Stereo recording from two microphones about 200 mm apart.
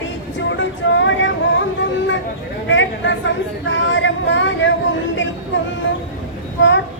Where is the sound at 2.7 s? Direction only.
65° left (ahead or behind).